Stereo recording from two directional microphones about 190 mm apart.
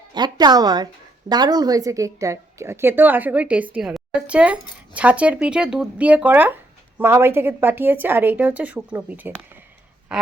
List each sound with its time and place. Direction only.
0.1 s a woman's voice: 20° right (ahead or behind); by 10.3 s 5° right (ahead or behind)